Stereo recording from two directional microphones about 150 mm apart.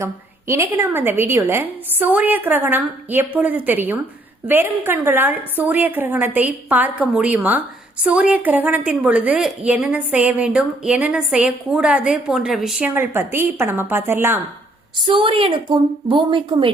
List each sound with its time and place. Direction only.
0.0 s a woman's voice: 20° right (ahead or behind); by 12.9 s 5° right (ahead or behind)
12.9 s a woman's voice: 15° right (ahead or behind)
15.0 s a woman's voice: 35° right (ahead or behind)